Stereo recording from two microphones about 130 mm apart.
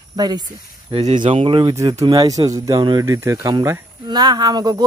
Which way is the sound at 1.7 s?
25° right (ahead or behind).